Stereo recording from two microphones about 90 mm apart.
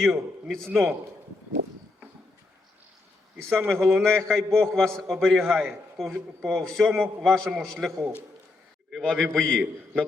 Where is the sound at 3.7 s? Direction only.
Centre (ahead or behind).